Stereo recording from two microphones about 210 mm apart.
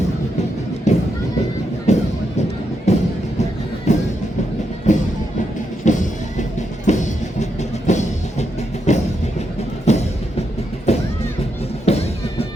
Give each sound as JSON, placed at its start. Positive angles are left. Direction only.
{"t": 0.9, "sound": "music", "side_deg": 35}
{"t": 1.9, "sound": "a sound", "side_deg": 30}
{"t": 2.9, "sound": "music", "side_deg": 30}